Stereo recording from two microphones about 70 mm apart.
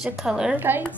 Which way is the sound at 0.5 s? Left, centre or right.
Right.